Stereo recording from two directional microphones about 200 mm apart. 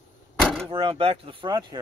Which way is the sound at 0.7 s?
25° right (ahead or behind).